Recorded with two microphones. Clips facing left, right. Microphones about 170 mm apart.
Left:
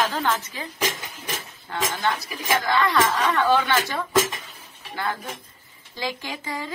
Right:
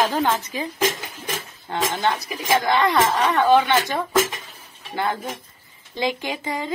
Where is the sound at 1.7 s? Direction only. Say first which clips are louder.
Right 3 dB; 25° right (ahead or behind).